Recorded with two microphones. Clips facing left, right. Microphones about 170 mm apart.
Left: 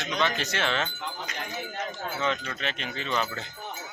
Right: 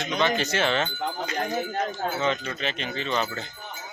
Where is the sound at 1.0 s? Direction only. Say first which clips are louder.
Right 7 dB; 45° right (ahead or behind).